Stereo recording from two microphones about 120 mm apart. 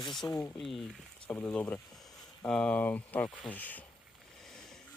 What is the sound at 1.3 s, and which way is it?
Speech, 10° left (ahead or behind).